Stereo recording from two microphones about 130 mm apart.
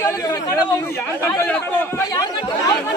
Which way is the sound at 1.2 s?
15° left (ahead or behind).